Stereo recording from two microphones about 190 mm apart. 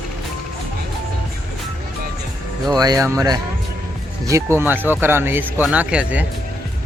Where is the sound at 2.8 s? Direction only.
20° right (ahead or behind).